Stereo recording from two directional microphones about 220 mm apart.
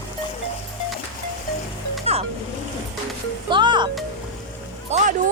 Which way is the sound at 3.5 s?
20° right (ahead or behind).